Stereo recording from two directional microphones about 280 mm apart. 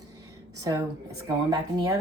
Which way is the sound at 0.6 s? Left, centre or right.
Centre.